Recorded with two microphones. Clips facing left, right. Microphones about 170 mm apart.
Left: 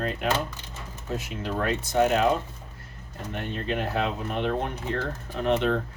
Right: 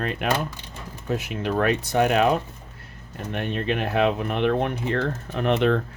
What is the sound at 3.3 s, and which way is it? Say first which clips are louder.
Speech: right 4 dB; 70° right (ahead or behind).